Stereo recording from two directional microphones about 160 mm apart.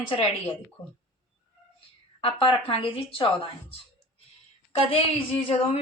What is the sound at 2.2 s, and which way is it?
A woman's voice, 35° left (ahead or behind).